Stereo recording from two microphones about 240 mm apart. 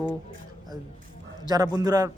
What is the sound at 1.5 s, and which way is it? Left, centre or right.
Speech, centre.